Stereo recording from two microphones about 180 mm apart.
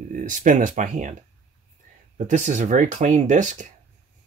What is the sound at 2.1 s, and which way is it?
Speech, 40° right (ahead or behind).